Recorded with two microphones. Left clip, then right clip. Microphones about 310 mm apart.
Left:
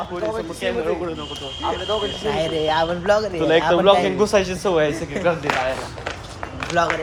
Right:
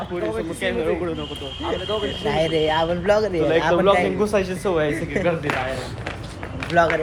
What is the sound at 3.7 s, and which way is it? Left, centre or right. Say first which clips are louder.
Speech: left 2 dB; left.